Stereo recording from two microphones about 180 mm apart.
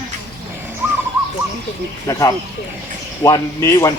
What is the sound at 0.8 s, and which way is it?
Owl, 10° right (ahead or behind).